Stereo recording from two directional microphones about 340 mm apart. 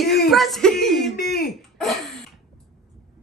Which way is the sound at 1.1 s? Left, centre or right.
Left.